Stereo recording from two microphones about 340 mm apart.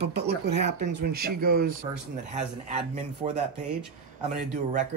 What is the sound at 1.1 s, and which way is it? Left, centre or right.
Speech, right.